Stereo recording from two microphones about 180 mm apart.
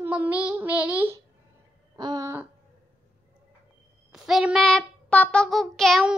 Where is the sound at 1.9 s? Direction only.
20° right (ahead or behind).